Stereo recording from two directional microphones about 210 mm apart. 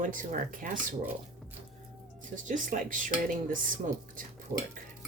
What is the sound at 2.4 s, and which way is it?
Speech, 40° right (ahead or behind).